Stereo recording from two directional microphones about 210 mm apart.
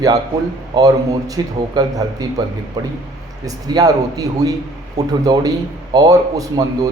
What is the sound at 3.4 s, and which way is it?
A man's voice, 15° right (ahead or behind).